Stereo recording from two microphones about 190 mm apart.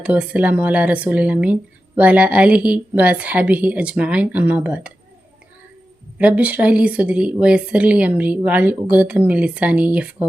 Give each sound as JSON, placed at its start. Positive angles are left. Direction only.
{"t": 0.0, "sound": "a woman's voice", "side_deg": -5}
{"t": 6.1, "sound": "a woman's voice", "side_deg": -5}